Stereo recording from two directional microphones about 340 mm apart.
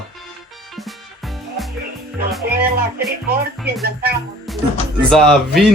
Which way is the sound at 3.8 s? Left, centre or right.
Right.